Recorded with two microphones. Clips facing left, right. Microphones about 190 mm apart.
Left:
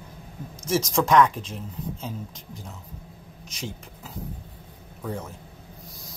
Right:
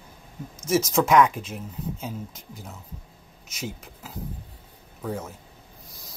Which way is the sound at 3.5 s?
5° right (ahead or behind).